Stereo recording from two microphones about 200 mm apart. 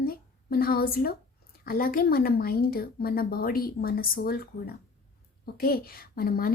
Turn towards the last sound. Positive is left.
turn(degrees=45)  # may be behind; listen again after turning